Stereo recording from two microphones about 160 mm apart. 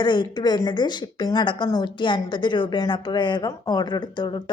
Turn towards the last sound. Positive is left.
turn(degrees=30)  # may be behind; listen again after turning